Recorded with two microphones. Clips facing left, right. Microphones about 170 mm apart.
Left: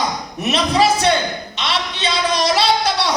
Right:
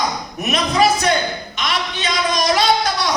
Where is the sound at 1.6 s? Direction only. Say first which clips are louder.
Left 1 dB; 30° left (ahead or behind).